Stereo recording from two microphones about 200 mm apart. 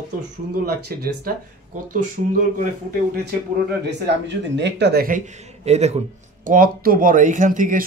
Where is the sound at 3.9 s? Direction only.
60° right (ahead or behind).